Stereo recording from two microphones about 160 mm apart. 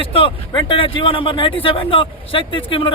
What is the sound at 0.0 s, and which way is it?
Speech, 35° left (ahead or behind).